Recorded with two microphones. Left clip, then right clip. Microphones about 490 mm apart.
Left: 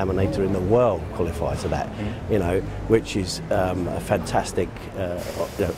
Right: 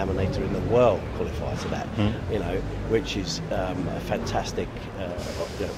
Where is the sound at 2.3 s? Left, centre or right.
Left.